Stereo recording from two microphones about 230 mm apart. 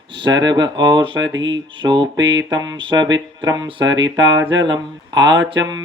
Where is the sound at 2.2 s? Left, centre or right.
Right.